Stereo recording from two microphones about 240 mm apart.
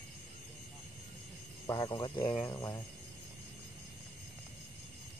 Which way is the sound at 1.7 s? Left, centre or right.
Centre.